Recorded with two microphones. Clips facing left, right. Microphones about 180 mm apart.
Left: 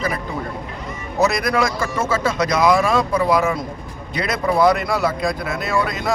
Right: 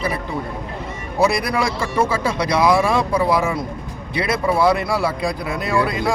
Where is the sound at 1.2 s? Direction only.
10° right (ahead or behind).